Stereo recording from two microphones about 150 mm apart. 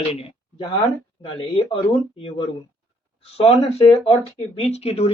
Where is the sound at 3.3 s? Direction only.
40° left (ahead or behind).